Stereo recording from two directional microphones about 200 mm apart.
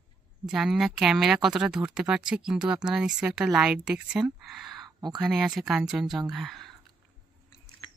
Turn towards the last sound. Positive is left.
turn(degrees=0)  # may be behind; listen again after turning